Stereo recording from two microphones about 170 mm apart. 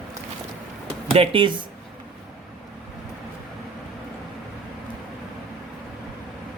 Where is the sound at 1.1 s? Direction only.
35° right (ahead or behind).